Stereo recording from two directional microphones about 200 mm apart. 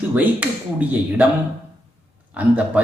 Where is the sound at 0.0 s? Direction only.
10° right (ahead or behind).